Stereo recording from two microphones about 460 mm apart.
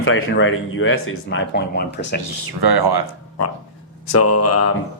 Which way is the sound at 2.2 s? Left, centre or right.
Right.